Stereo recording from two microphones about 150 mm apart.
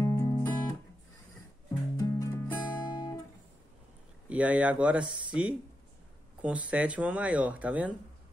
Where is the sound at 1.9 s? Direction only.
20° left (ahead or behind).